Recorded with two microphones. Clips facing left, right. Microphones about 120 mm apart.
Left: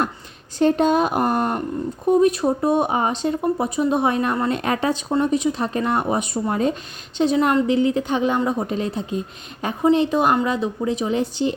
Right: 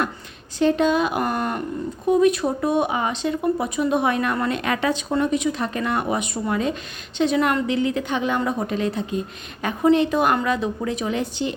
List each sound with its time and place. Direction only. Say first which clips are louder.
0.6 s speech: left 2 dB; 50° left (ahead or behind)
3.4 s a woman's voice: left 1 dB; 30° left (ahead or behind)